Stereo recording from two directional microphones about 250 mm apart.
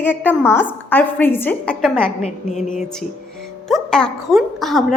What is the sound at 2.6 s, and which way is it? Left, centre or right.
Speech, left.